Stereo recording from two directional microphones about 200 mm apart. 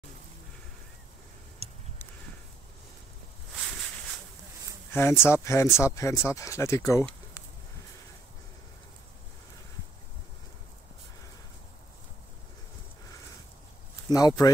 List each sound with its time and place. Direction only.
4.9 s speech: 10° left (ahead or behind)
14.1 s speech: 20° left (ahead or behind)